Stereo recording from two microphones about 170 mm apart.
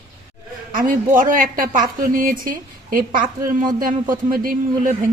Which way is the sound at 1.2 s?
55° right (ahead or behind).